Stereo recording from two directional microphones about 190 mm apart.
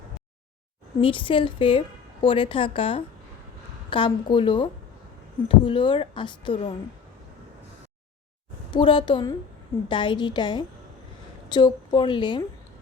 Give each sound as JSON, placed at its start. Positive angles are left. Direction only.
{"t": 1.0, "sound": "a woman's voice", "side_deg": 25}
{"t": 8.7, "sound": "a woman's voice", "side_deg": 25}